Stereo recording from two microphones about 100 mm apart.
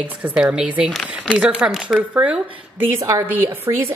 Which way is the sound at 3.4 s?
20° right (ahead or behind).